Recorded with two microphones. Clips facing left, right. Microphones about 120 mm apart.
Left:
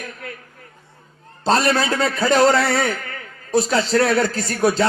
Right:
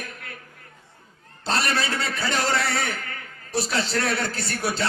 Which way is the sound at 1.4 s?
35° left (ahead or behind).